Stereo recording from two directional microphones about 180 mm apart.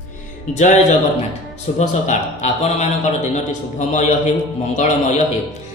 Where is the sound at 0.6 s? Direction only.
40° left (ahead or behind).